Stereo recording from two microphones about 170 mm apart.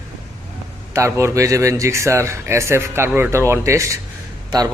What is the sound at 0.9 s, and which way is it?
Speech, 15° right (ahead or behind).